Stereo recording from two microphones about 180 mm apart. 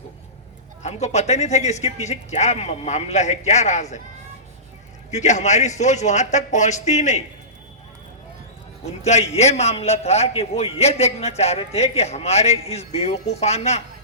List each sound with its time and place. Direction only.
0.8 s a man's voice: 40° left (ahead or behind)
5.1 s a man's voice: 40° left (ahead or behind)
9.0 s a man's voice: 35° left (ahead or behind)